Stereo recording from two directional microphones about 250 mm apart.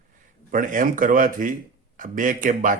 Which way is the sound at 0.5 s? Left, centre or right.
Right.